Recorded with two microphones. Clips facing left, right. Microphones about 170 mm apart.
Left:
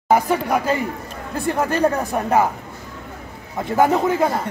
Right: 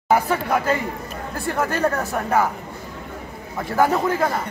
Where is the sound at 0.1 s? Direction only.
15° left (ahead or behind).